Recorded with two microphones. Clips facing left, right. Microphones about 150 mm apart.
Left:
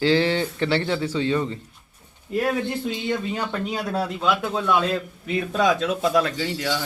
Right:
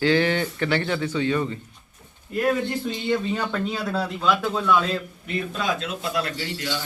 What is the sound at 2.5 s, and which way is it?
Speech, 5° left (ahead or behind).